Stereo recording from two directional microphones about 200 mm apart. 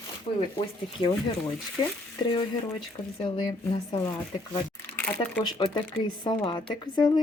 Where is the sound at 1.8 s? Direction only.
25° left (ahead or behind).